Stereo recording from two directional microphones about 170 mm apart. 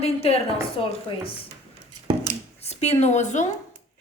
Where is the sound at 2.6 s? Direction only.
40° left (ahead or behind).